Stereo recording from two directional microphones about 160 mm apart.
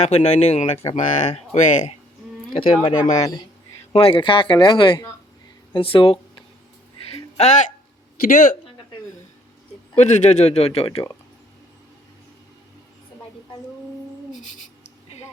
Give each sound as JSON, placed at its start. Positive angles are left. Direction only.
{"t": 0.0, "sound": "speech", "side_deg": 45}
{"t": 2.5, "sound": "speech", "side_deg": 35}
{"t": 7.1, "sound": "a sound", "side_deg": 45}
{"t": 8.2, "sound": "speech", "side_deg": 60}
{"t": 9.9, "sound": "speech", "side_deg": 45}